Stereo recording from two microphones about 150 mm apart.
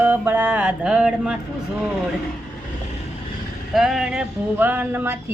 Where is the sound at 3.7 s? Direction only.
Centre (ahead or behind).